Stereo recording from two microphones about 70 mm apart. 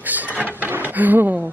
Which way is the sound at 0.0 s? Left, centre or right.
Right.